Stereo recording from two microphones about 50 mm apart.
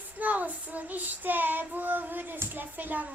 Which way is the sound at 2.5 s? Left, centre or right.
Right.